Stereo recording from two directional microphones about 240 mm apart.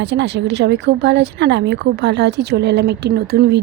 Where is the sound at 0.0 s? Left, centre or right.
Right.